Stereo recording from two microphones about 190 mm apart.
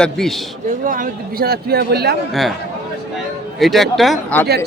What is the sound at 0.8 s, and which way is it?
Speech, 45° right (ahead or behind).